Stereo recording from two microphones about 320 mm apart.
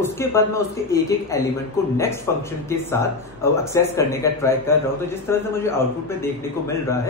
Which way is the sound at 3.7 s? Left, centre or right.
Centre.